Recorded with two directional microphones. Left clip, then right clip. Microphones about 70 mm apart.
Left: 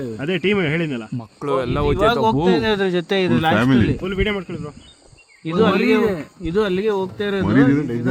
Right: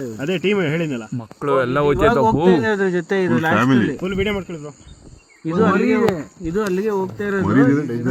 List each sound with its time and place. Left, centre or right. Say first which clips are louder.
0.2 s speech: even; right
1.4 s speech: right 3 dB; right
2.6 s speech: even; left
4.0 s speech: even; right
5.5 s speech: left 1 dB; left
6.4 s speech: left 2 dB; left
7.7 s a man's voice: even; left